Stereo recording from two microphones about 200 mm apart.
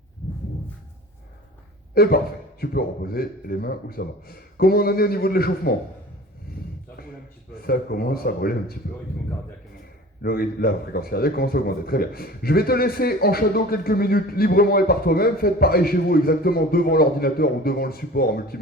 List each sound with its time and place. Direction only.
2.0 s speech: 50° left (ahead or behind)
7.6 s speech: 50° left (ahead or behind)
10.2 s speech: 50° left (ahead or behind)